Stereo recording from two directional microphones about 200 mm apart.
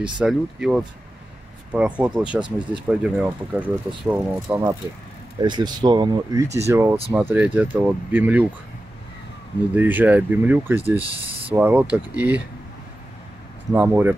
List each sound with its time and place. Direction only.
0.0 s speech: 5° right (ahead or behind)
9.8 s speech: 10° right (ahead or behind)
13.7 s speech: 10° right (ahead or behind)